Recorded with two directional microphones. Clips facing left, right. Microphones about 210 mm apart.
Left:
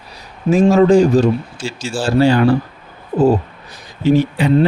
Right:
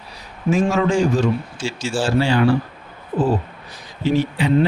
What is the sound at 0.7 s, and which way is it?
A man's voice, 35° left (ahead or behind).